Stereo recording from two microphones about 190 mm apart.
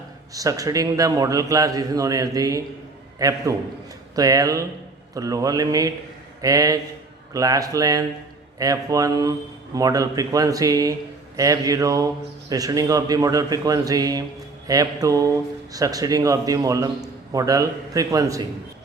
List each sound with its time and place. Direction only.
0.3 s a man's voice: 20° right (ahead or behind)